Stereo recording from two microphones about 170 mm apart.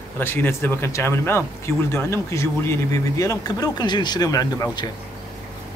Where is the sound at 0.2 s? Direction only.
15° left (ahead or behind).